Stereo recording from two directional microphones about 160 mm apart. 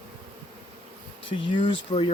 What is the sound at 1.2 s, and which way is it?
Speech, 30° left (ahead or behind).